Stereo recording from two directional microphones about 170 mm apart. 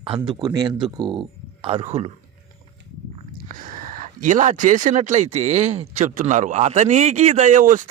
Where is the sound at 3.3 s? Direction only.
55° right (ahead or behind).